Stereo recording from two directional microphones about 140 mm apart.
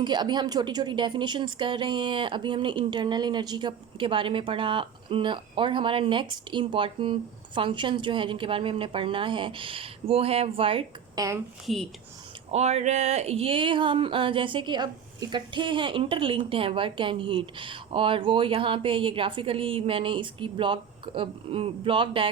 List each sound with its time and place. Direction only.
0.0 s speech: 30° right (ahead or behind)
11.1 s a woman's voice: 25° right (ahead or behind)
11.6 s speech: centre (ahead or behind)
12.5 s speech: 50° right (ahead or behind)